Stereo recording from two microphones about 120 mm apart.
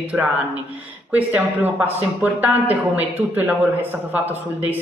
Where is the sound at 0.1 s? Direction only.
15° right (ahead or behind).